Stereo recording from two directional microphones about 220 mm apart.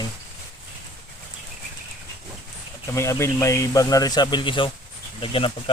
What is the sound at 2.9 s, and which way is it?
A man's voice, 15° left (ahead or behind).